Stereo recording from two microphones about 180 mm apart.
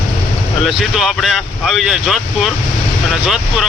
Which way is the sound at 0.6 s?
Centre (ahead or behind).